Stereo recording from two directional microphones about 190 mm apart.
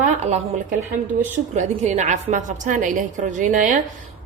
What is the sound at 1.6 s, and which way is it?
A woman's voice, 40° right (ahead or behind).